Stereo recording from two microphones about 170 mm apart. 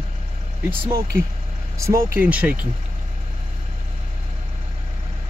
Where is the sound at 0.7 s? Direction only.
15° right (ahead or behind).